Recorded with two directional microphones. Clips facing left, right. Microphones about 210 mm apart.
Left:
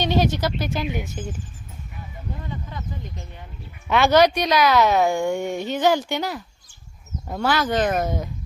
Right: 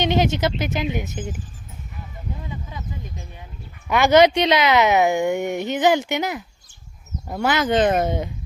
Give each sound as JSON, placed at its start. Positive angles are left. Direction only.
{"t": 0.0, "sound": "speech", "side_deg": -20}
{"t": 2.4, "sound": "a sound", "side_deg": -10}
{"t": 3.8, "sound": "speech", "side_deg": -15}